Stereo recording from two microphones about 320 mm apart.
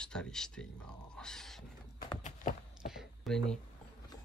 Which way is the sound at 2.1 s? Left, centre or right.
Left.